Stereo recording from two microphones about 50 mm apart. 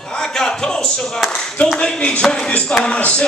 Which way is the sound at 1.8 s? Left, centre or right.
Left.